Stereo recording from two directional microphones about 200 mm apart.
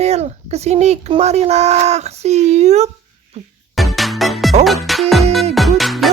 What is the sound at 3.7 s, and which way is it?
Music, centre (ahead or behind).